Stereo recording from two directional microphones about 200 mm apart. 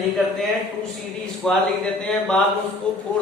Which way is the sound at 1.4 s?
5° left (ahead or behind).